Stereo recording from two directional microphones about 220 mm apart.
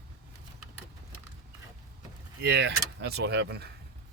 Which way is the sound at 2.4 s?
50° right (ahead or behind).